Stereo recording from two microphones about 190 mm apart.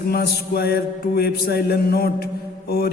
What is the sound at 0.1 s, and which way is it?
Mantra, 55° left (ahead or behind).